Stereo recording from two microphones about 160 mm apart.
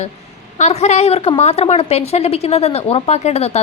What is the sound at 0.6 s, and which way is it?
A woman's voice, 45° left (ahead or behind).